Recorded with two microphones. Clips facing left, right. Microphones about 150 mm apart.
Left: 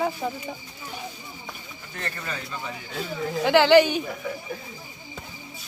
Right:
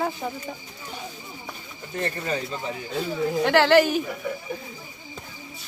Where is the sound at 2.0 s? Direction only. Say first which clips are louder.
Right 6 dB; 30° right (ahead or behind).